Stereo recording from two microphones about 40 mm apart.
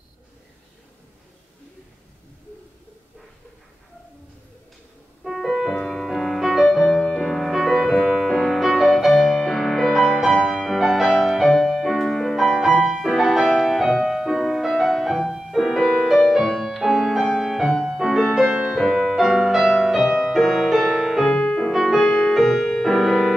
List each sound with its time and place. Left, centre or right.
5.2 s music: centre
8.4 s music: centre
18.5 s music: right
18.8 s music: centre
21.3 s music: left
22.3 s music: centre
22.9 s music: centre